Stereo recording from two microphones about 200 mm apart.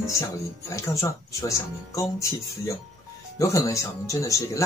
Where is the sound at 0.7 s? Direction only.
15° left (ahead or behind).